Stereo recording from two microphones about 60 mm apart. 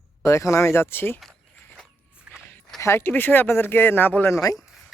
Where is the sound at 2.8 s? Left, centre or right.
Left.